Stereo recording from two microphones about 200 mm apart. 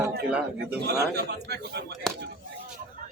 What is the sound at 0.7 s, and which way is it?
Speech, 55° right (ahead or behind).